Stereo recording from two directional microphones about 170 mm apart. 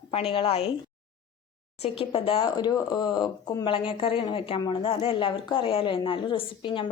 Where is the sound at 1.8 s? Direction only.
35° left (ahead or behind).